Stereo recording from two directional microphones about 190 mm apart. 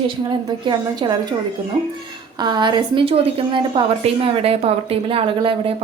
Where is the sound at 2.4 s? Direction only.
25° right (ahead or behind).